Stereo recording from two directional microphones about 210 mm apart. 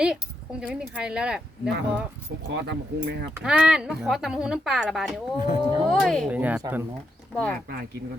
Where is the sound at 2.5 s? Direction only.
55° right (ahead or behind).